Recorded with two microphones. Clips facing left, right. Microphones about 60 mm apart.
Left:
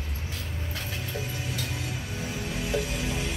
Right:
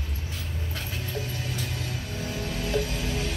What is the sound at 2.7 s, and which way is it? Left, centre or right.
Music, centre.